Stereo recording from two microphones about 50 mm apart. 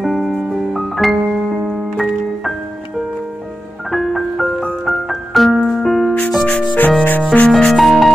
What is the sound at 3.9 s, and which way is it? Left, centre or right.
Music, centre.